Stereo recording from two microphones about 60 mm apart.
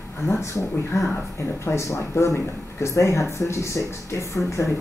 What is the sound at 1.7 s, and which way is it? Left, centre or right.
Speech, left.